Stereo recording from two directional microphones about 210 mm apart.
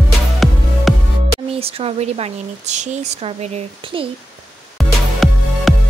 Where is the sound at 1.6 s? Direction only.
25° right (ahead or behind).